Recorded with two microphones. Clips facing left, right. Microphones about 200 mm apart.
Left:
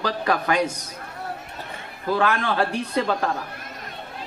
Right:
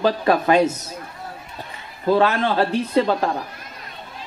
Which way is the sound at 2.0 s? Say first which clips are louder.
Right 5 dB; 25° right (ahead or behind).